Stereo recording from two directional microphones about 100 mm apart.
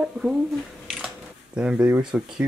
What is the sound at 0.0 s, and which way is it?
Speech, 5° right (ahead or behind).